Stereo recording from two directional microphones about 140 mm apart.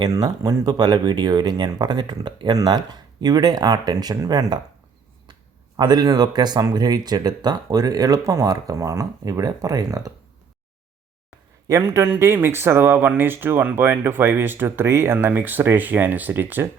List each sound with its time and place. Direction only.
0.0 s speech: 25° right (ahead or behind)
11.7 s speech: 20° right (ahead or behind)